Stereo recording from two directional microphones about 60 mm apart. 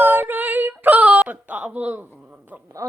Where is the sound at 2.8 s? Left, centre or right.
Right.